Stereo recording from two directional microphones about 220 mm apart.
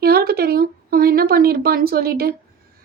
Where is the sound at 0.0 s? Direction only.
45° right (ahead or behind).